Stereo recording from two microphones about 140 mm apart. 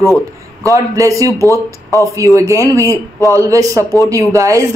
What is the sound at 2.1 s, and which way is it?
A woman's voice, 20° right (ahead or behind).